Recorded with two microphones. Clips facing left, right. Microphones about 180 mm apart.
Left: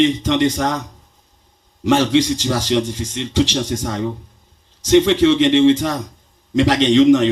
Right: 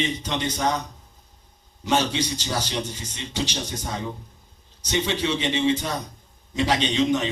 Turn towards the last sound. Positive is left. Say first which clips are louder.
# left 11 dB
turn(degrees=90)